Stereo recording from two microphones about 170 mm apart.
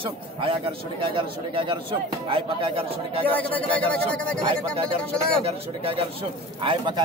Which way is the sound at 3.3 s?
10° left (ahead or behind).